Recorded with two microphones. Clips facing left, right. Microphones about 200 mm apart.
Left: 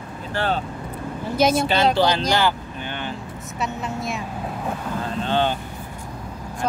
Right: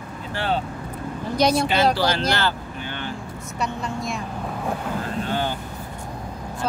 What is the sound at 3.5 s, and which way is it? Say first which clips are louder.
Speech: even; centre (ahead or behind).